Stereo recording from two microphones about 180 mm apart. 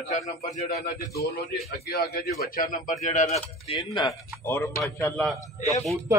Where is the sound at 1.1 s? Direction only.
60° left (ahead or behind); by 3.7 s 40° left (ahead or behind).